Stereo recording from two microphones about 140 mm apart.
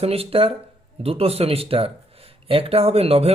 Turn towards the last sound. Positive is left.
turn(degrees=-45)  # may be behind; listen again after turning